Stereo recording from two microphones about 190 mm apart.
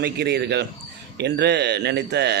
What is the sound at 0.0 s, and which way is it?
A man's voice, 60° right (ahead or behind).